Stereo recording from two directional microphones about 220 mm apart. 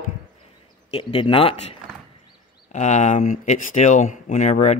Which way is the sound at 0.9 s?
25° left (ahead or behind).